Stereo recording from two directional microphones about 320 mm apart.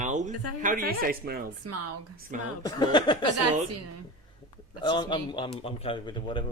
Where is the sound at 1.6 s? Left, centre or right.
Right.